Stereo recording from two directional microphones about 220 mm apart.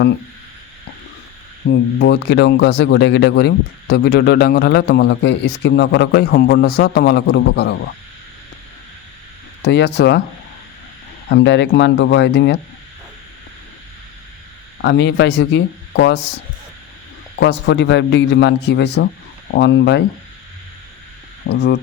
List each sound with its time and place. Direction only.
1.6 s speech: 50° left (ahead or behind)
9.6 s speech: 50° left (ahead or behind)
11.3 s speech: 50° left (ahead or behind)
14.8 s speech: 55° left (ahead or behind)
17.4 s speech: 50° left (ahead or behind)
21.4 s speech: 50° left (ahead or behind)